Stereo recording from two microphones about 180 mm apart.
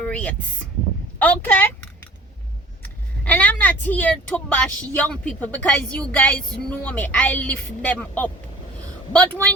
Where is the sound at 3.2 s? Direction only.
10° left (ahead or behind).